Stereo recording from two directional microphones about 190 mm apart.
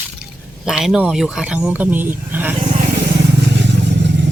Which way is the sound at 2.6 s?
35° right (ahead or behind).